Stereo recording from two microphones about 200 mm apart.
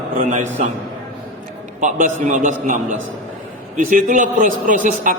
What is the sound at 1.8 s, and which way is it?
A man's voice, 40° right (ahead or behind).